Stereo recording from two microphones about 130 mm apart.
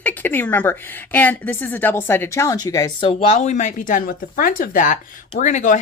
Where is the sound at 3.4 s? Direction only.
70° left (ahead or behind); by 5.0 s 90° left.